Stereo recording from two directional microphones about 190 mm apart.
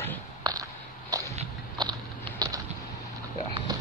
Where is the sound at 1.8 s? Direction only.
20° right (ahead or behind).